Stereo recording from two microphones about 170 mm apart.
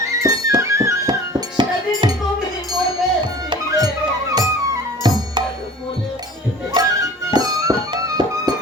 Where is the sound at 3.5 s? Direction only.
20° right (ahead or behind).